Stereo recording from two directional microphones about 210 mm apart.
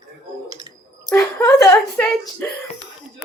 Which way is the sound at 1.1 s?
10° left (ahead or behind).